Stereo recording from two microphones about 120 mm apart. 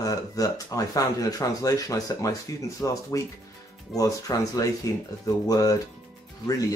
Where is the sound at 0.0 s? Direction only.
30° left (ahead or behind).